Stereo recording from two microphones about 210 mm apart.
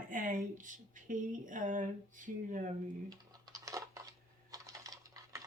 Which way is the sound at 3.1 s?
15° right (ahead or behind).